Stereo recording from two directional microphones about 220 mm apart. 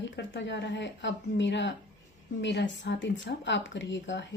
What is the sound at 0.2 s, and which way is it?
Speech, 55° left (ahead or behind).